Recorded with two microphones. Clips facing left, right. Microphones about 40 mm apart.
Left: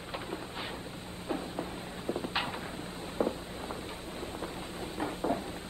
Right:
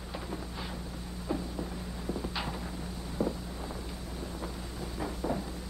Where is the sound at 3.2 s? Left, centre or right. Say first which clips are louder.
Left 1 dB; left.